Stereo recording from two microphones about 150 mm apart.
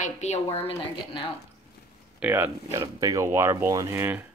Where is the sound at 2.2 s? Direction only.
10° right (ahead or behind).